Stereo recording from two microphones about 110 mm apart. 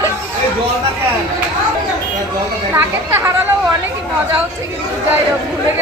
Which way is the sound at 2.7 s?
25° right (ahead or behind).